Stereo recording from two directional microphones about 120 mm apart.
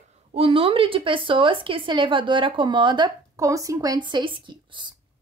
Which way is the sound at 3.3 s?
25° right (ahead or behind).